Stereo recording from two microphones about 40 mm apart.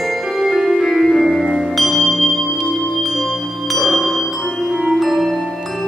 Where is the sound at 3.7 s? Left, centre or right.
Centre.